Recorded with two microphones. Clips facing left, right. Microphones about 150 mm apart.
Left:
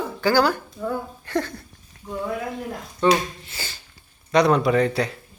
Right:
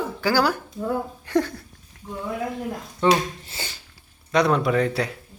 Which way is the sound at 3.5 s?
25° right (ahead or behind).